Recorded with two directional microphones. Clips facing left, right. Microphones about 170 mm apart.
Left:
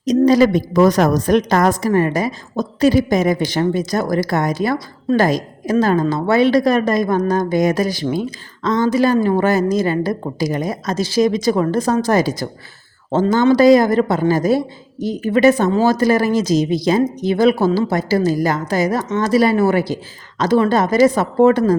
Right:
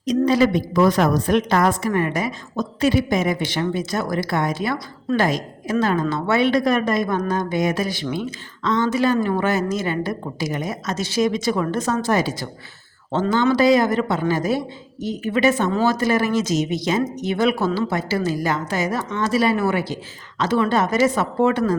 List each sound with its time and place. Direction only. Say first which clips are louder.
0.0 s a woman's voice: left 5 dB; 40° left (ahead or behind)